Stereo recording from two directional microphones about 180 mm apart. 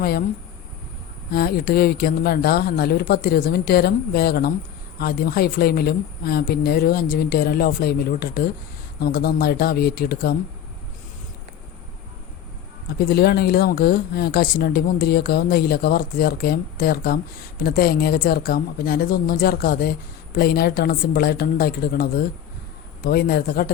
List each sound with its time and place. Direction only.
0.0 s speech: 60° left (ahead or behind)
1.3 s speech: 60° left (ahead or behind)
13.0 s speech: 60° left (ahead or behind)